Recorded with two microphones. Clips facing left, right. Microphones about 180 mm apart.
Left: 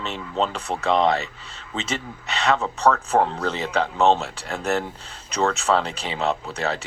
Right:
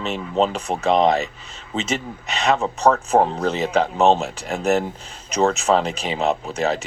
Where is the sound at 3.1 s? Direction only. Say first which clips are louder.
Right 3 dB; 15° right (ahead or behind).